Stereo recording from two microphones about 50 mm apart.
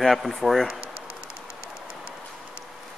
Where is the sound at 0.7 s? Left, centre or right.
Right.